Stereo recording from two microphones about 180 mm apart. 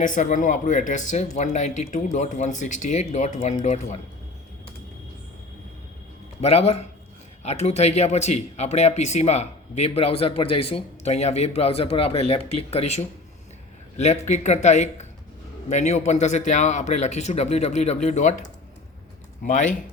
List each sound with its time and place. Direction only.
0.0 s speech: 45° left (ahead or behind)
6.4 s speech: 35° left (ahead or behind)